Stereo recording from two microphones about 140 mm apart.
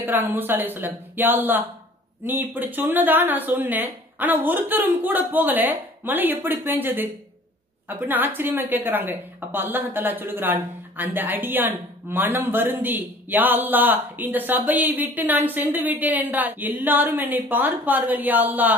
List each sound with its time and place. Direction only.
0.0 s a woman's voice: 15° right (ahead or behind)